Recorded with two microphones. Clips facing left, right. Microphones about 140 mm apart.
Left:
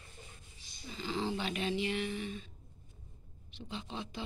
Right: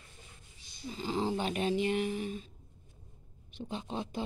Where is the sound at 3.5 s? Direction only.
45° right (ahead or behind).